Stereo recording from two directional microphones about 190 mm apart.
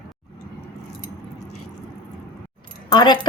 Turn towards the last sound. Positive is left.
turn(degrees=20)  # may be behind; listen again after turning